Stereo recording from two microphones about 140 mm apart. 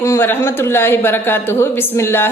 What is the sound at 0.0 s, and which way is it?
A woman's voice, 20° left (ahead or behind).